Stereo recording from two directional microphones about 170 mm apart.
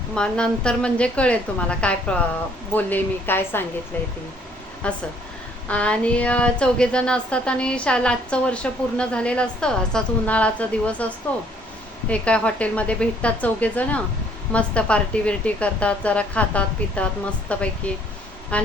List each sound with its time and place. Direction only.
0.1 s speech: 5° left (ahead or behind)
4.8 s speech: 5° left (ahead or behind)